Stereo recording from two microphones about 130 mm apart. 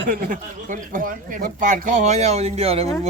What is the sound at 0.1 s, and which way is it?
Speech, 90° right.